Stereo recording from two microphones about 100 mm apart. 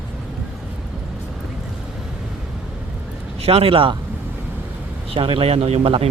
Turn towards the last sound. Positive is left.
turn(degrees=-80)